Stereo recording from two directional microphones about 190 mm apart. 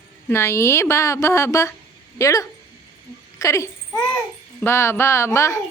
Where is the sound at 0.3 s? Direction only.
15° left (ahead or behind).